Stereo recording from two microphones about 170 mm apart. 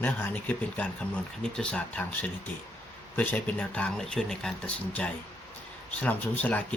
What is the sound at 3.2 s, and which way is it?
Speech, 10° left (ahead or behind).